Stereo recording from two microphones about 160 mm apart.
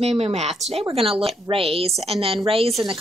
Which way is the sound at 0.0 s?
40° right (ahead or behind).